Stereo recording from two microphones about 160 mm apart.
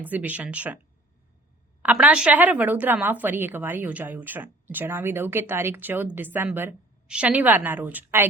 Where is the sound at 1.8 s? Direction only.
10° right (ahead or behind).